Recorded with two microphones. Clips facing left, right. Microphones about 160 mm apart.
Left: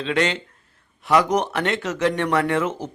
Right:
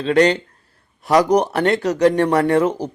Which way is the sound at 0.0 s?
40° right (ahead or behind).